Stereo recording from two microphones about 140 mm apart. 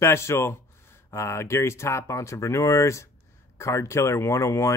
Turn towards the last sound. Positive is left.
turn(degrees=20)  # may be behind; listen again after turning